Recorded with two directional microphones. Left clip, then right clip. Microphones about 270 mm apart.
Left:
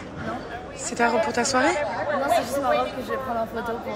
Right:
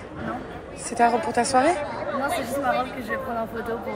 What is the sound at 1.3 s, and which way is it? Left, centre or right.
Speech, centre.